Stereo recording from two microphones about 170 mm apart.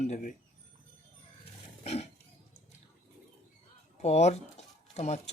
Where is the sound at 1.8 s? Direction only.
35° left (ahead or behind).